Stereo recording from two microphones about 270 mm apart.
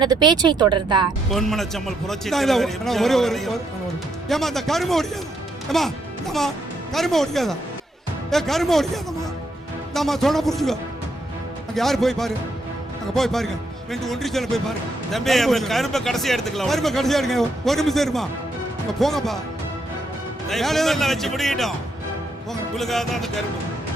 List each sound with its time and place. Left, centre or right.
0.0 s speech: centre
1.3 s speech: centre
9.9 s speech: centre
20.5 s speech: centre
22.7 s speech: centre